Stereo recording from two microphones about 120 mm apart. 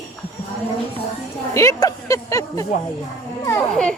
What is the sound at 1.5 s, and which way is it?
Speech, 30° left (ahead or behind).